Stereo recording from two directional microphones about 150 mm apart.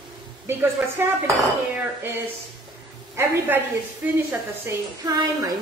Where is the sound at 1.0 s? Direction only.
15° right (ahead or behind).